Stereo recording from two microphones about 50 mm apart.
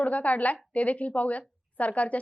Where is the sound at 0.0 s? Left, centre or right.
Left.